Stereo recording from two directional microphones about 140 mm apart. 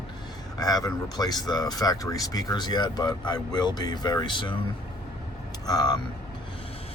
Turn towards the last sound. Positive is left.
turn(degrees=30)  # may be behind; listen again after turning